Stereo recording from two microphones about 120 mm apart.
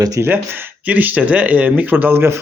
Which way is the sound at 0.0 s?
30° right (ahead or behind).